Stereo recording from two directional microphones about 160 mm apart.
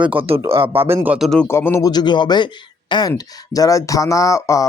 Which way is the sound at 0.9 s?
10° right (ahead or behind).